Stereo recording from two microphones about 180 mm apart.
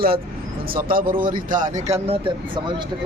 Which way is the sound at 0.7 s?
55° right (ahead or behind).